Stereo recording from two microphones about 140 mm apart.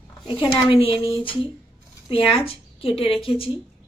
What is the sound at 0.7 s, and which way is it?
Speech, 40° left (ahead or behind).